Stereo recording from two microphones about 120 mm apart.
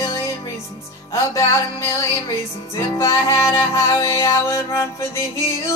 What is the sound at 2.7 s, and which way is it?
Music, 25° left (ahead or behind).